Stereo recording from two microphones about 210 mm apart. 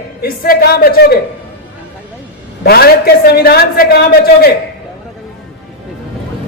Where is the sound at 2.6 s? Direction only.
50° left (ahead or behind).